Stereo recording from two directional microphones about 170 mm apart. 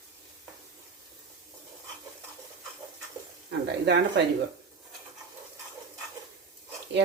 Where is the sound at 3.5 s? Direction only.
85° right.